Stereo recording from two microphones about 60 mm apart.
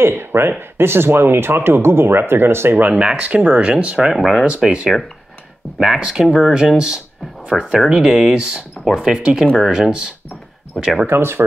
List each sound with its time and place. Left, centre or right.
0.0 s speech: right
2.8 s speech: centre
4.1 s speech: centre
4.6 s speech: centre
6.3 s speech: centre
11.1 s speech: right